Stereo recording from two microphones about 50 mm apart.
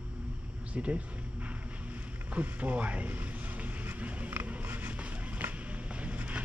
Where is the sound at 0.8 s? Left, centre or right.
Right.